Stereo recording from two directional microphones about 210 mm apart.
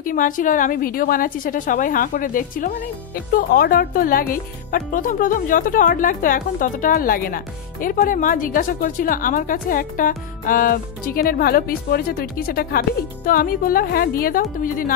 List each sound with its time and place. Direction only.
0.0 s speech: 40° left (ahead or behind)